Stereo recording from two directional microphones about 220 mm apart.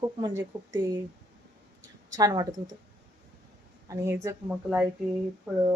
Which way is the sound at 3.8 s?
15° right (ahead or behind).